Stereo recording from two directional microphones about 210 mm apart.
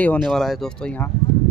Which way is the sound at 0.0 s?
5° left (ahead or behind).